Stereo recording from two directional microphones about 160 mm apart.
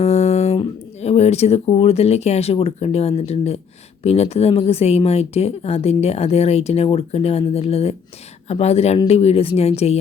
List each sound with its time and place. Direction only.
0.0 s speech: 45° left (ahead or behind)